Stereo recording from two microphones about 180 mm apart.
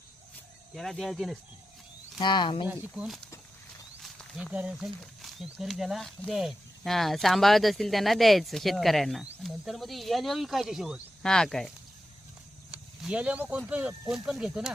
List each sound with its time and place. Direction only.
0.8 s speech: centre (ahead or behind)
2.1 s speech: 25° left (ahead or behind)
2.6 s speech: 10° right (ahead or behind)
12.7 s speech: 5° right (ahead or behind)